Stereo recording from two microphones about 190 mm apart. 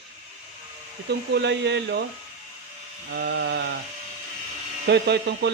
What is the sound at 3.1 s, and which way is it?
Speech, 60° right (ahead or behind).